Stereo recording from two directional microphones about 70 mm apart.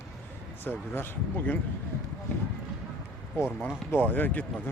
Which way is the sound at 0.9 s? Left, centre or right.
Left.